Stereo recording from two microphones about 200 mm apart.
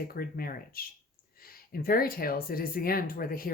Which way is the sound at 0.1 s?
45° left (ahead or behind).